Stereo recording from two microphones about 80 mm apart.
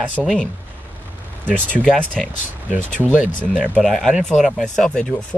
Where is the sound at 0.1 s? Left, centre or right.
Centre.